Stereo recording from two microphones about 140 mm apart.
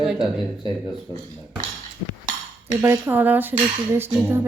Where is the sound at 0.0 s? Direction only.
5° right (ahead or behind).